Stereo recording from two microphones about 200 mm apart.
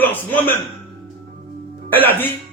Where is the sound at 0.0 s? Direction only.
10° left (ahead or behind).